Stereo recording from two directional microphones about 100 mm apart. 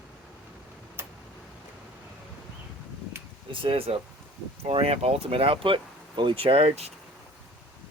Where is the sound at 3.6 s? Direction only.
70° right (ahead or behind); by 6.9 s 85° right.